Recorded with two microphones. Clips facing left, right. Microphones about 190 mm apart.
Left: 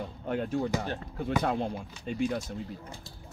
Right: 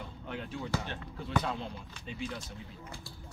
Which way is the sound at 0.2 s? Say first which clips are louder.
Left 10 dB; 45° left (ahead or behind).